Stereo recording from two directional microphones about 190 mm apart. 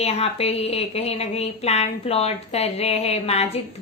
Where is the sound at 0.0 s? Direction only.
35° left (ahead or behind).